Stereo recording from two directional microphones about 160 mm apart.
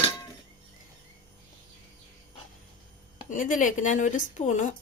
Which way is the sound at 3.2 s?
55° left (ahead or behind).